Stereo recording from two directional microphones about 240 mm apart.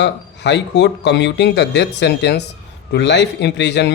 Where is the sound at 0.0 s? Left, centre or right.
Left.